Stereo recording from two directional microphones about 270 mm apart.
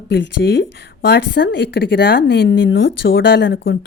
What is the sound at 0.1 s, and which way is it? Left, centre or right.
A woman's voice, left.